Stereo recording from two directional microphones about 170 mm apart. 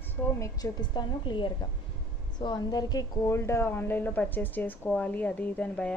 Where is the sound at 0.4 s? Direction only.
25° left (ahead or behind).